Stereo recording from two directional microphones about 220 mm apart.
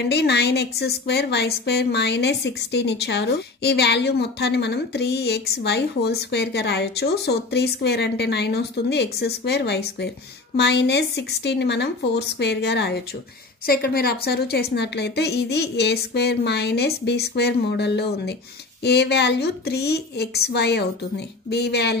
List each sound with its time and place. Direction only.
0.0 s a woman's voice: 50° left (ahead or behind)